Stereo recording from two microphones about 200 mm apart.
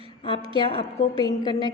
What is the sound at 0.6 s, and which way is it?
A woman's voice, 25° left (ahead or behind).